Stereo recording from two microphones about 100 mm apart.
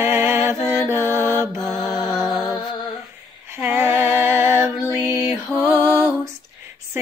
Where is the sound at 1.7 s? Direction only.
45° left (ahead or behind).